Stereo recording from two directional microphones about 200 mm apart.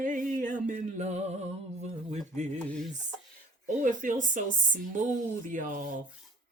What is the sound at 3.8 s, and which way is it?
Speech, 40° right (ahead or behind).